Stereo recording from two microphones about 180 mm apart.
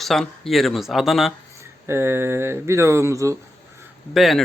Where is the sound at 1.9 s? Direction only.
15° right (ahead or behind).